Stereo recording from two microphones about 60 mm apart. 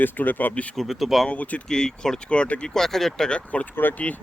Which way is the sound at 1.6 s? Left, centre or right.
Centre.